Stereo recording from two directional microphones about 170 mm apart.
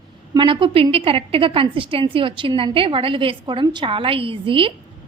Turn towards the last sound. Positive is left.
turn(degrees=-30)  # may be behind; listen again after turning